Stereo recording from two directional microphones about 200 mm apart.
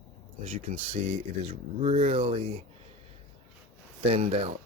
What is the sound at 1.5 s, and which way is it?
Speech, 30° right (ahead or behind).